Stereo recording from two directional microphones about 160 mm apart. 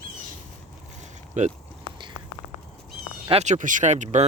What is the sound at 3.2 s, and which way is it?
Speech, 40° right (ahead or behind).